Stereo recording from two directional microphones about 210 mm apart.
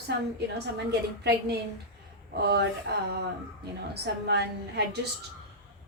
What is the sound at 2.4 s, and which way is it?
A woman's voice, 50° right (ahead or behind).